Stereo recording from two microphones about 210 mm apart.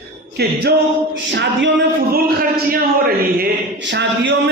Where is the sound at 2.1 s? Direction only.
45° right (ahead or behind).